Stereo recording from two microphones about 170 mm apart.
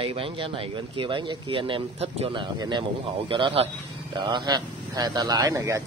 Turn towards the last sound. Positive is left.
turn(degrees=-20)  # may be behind; listen again after turning